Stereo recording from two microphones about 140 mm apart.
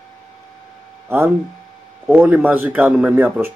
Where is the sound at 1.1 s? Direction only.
15° right (ahead or behind).